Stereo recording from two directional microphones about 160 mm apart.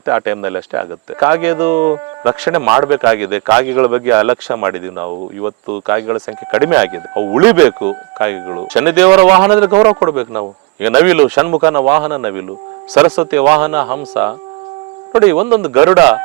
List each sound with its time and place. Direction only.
0.0 s speech: 15° right (ahead or behind)
5.8 s speech: 15° right (ahead or behind)
7.1 s speech: 25° right (ahead or behind)
7.3 s speech: 15° right (ahead or behind)
9.9 s speech: 25° right (ahead or behind)
10.8 s speech: 10° right (ahead or behind)
13.5 s speech: 10° right (ahead or behind)